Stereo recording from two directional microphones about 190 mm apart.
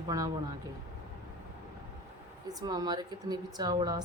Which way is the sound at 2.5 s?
20° right (ahead or behind).